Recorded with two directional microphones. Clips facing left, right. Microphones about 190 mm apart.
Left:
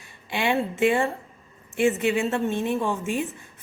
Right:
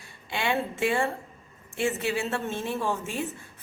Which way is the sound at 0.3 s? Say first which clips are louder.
Left 4 dB; 20° left (ahead or behind).